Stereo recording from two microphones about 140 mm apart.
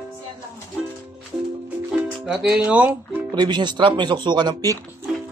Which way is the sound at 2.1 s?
5° right (ahead or behind).